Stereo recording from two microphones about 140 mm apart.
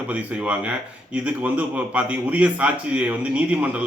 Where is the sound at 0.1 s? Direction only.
10° right (ahead or behind).